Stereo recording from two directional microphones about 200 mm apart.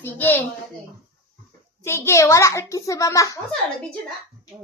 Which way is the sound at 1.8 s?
15° left (ahead or behind).